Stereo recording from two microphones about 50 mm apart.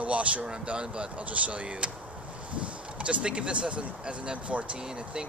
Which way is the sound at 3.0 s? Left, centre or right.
Right.